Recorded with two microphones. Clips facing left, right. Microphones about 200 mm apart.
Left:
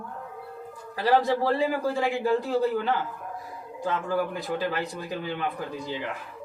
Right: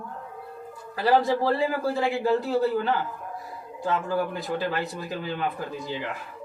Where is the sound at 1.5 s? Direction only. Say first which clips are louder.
Even; 15° left (ahead or behind).